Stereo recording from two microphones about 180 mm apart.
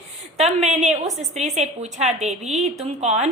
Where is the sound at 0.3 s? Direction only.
35° right (ahead or behind).